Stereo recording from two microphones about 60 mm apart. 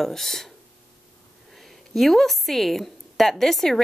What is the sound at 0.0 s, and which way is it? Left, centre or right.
Speech, centre.